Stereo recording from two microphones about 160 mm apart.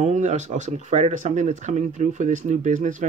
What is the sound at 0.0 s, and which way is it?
Speech, 50° right (ahead or behind).